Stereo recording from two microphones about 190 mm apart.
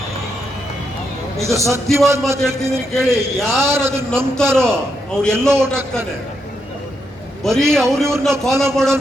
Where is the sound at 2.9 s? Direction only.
Centre (ahead or behind).